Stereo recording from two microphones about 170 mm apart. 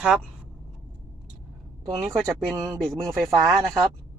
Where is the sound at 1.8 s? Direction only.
20° right (ahead or behind).